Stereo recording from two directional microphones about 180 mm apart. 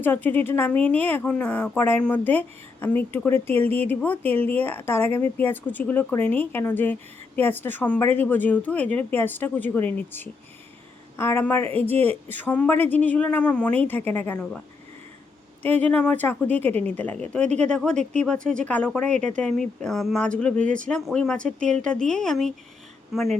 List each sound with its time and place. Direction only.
0.0 s a woman's voice: 10° left (ahead or behind)
15.6 s a woman's voice: 10° left (ahead or behind)